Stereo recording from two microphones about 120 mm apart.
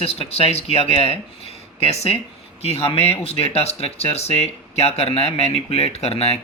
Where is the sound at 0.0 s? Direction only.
60° left (ahead or behind).